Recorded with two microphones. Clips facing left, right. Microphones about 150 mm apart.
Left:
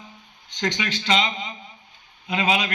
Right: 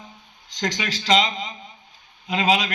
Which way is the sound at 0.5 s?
35° right (ahead or behind).